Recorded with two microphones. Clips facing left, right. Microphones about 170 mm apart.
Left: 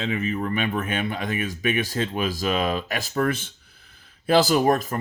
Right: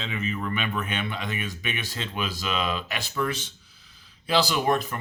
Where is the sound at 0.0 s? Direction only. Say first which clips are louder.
Left 5 dB; 45° left (ahead or behind).